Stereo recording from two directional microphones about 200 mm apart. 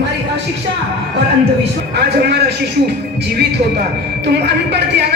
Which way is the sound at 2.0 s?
55° right (ahead or behind).